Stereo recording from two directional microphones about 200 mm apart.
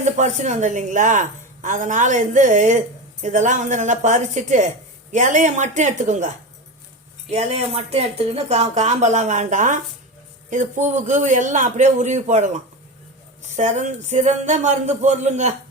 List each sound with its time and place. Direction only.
0.0 s a woman's voice: 35° right (ahead or behind)